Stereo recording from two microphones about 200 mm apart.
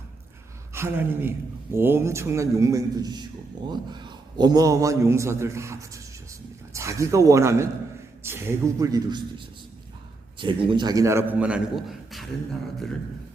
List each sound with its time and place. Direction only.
0.7 s a woman's voice: 10° right (ahead or behind)
10.3 s a man's voice: 25° right (ahead or behind); by 12.3 s centre (ahead or behind)